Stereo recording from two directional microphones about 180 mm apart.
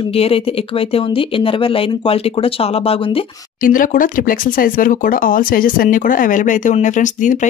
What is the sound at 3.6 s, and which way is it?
Speech, 50° left (ahead or behind).